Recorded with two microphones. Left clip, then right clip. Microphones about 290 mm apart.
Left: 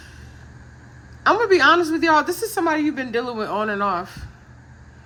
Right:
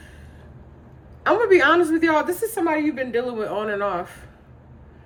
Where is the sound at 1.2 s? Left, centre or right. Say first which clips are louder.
Left 1 dB; centre.